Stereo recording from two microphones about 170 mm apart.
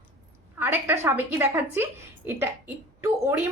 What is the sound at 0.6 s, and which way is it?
A woman's voice, 10° right (ahead or behind).